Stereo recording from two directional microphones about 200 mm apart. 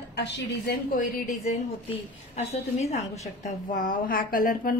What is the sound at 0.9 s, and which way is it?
Speech, 45° left (ahead or behind).